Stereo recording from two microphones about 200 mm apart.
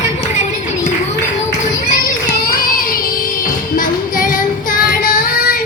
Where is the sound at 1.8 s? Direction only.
45° left (ahead or behind).